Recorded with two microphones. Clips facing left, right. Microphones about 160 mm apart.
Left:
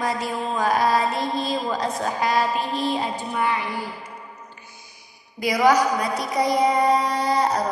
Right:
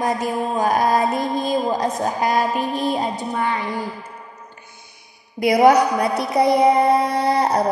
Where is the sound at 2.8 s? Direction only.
45° right (ahead or behind).